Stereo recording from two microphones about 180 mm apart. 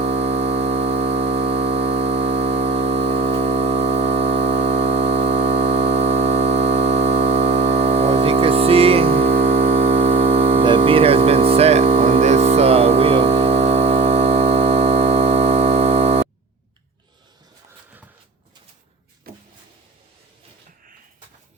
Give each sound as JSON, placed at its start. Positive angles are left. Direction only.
{"t": 0.0, "sound": "music", "side_deg": -35}
{"t": 19.3, "sound": "power windows", "side_deg": -55}